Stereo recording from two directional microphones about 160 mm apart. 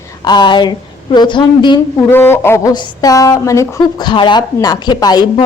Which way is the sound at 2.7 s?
25° left (ahead or behind).